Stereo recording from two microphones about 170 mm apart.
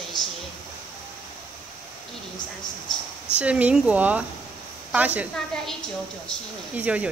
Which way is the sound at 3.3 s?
5° right (ahead or behind).